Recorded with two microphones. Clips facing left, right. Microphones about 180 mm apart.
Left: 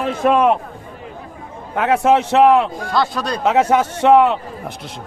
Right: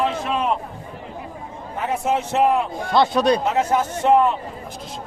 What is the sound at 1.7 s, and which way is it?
Speech, 75° left (ahead or behind).